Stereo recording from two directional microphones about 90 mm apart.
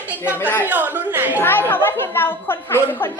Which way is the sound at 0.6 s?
20° right (ahead or behind).